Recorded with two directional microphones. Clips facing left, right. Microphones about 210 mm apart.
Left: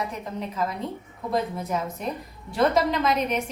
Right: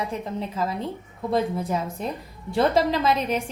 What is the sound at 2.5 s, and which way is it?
Speech, 30° right (ahead or behind).